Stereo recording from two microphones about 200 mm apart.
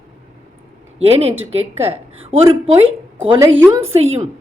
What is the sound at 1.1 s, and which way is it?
A woman's voice, 30° right (ahead or behind).